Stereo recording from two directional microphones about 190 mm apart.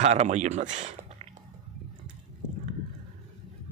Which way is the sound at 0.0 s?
35° right (ahead or behind).